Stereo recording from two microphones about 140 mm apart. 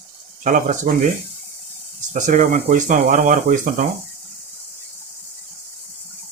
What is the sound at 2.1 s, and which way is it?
Speech, 60° right (ahead or behind).